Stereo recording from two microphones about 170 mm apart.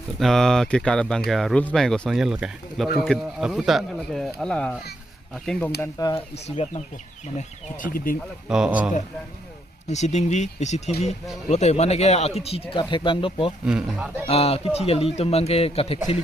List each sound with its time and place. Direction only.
0.2 s speech: centre (ahead or behind)
5.8 s speech: 25° left (ahead or behind)
6.3 s speech: 40° left (ahead or behind)
7.3 s speech: 55° left (ahead or behind)
8.4 s speech: 5° right (ahead or behind)
9.9 s speech: 40° left (ahead or behind)
13.7 s speech: 5° right (ahead or behind)
14.3 s speech: 35° left (ahead or behind)